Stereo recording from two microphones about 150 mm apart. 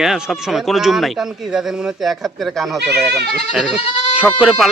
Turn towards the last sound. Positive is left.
turn(degrees=-5)  # may be behind; listen again after turning